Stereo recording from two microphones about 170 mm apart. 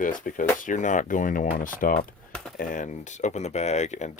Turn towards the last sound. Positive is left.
turn(degrees=45)  # may be behind; listen again after turning